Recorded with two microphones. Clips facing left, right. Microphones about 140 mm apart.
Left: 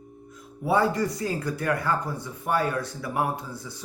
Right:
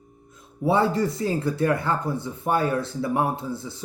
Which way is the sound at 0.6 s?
25° right (ahead or behind).